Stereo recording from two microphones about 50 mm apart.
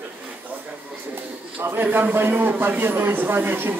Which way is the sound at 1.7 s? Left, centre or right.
Right.